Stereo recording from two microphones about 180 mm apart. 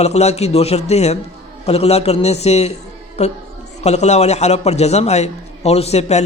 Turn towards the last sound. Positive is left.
turn(degrees=35)  # may be behind; listen again after turning